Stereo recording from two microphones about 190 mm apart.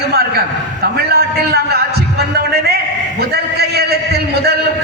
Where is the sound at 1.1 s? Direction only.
55° right (ahead or behind).